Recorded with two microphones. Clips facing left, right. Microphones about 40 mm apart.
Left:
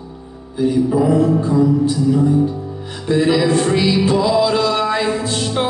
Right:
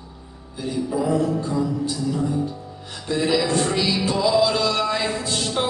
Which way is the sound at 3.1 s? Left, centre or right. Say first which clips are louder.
Left 6 dB; centre.